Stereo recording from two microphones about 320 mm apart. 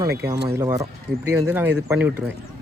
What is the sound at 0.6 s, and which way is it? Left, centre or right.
Speech, centre.